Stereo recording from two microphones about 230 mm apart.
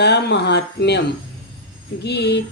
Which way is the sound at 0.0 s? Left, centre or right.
Left.